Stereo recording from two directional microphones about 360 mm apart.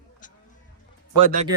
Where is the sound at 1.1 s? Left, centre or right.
Centre.